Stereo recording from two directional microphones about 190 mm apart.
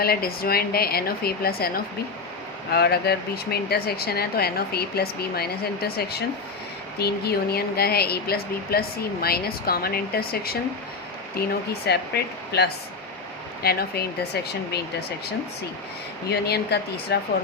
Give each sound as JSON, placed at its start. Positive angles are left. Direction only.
{"t": 0.0, "sound": "a woman's voice", "side_deg": 55}
{"t": 16.3, "sound": "speech", "side_deg": 60}